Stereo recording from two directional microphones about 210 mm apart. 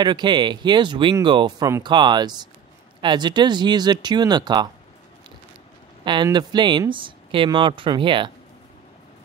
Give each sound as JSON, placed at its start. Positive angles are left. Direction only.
{"t": 0.0, "sound": "speech", "side_deg": -20}
{"t": 6.0, "sound": "speech", "side_deg": -20}